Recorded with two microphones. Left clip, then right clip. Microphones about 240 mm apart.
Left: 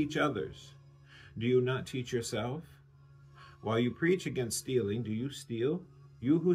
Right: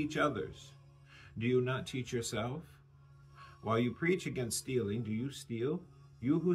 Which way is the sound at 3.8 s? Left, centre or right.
Centre.